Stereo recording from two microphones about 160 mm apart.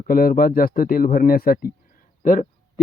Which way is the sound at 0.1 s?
65° left (ahead or behind).